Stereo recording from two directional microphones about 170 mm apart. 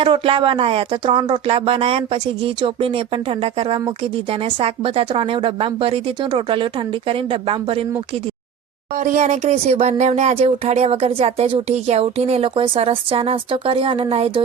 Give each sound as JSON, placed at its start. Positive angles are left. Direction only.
{"t": 0.0, "sound": "speech", "side_deg": -30}
{"t": 9.0, "sound": "speech", "side_deg": -45}